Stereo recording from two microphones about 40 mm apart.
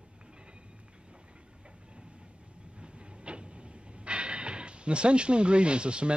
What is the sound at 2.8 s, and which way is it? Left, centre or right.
Train, right.